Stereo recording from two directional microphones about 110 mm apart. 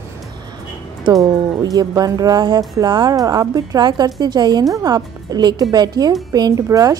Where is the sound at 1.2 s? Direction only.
35° right (ahead or behind).